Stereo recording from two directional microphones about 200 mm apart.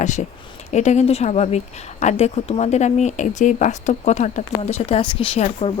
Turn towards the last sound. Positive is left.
turn(degrees=30)  # may be behind; listen again after turning